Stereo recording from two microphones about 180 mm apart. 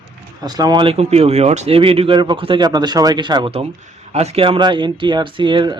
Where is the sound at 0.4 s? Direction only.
20° right (ahead or behind).